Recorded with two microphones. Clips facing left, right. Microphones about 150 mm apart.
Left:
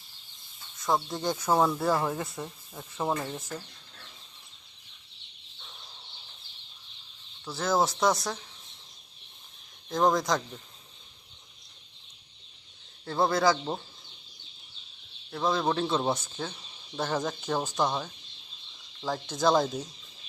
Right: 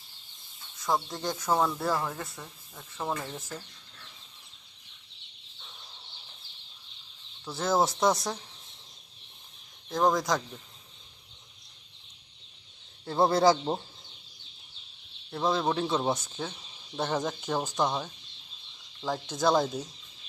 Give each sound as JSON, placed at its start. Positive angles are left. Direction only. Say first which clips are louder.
{"t": 0.9, "sound": "speech", "louder": "left 2 dB", "side_deg": 0}
{"t": 1.9, "sound": "speech", "louder": "left 3 dB", "side_deg": 20}
{"t": 7.4, "sound": "speech", "louder": "even", "side_deg": -15}
{"t": 9.9, "sound": "speech", "louder": "left 1 dB", "side_deg": -5}
{"t": 13.1, "sound": "speech", "louder": "right 2 dB", "side_deg": -15}
{"t": 13.3, "sound": "speech", "louder": "right 3 dB", "side_deg": -30}
{"t": 15.3, "sound": "speech", "louder": "even", "side_deg": -15}
{"t": 16.0, "sound": "speech", "louder": "even", "side_deg": 0}
{"t": 16.3, "sound": "cricket", "louder": "even", "side_deg": -5}
{"t": 17.1, "sound": "speech", "louder": "left 1 dB", "side_deg": -10}
{"t": 17.7, "sound": "speech", "louder": "even", "side_deg": 0}
{"t": 19.1, "sound": "speech", "louder": "left 1 dB", "side_deg": -10}